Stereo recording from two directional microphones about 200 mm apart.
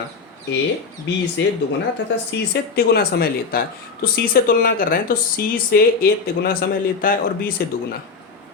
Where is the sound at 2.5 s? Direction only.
50° left (ahead or behind).